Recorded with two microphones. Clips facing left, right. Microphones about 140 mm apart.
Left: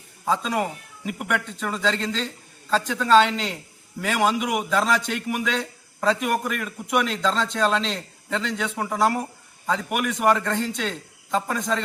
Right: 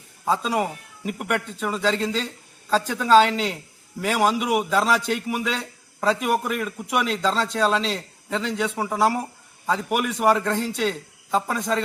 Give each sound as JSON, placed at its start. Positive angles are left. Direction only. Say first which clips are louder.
{"t": 0.3, "sound": "a man's voice", "louder": "right 1 dB", "side_deg": -5}